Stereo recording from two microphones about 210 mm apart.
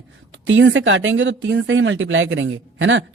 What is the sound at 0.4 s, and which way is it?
Speech, 60° right (ahead or behind).